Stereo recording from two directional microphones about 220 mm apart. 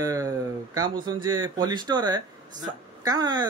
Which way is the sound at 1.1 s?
20° right (ahead or behind).